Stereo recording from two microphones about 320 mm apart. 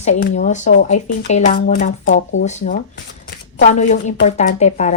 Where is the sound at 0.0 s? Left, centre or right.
Left.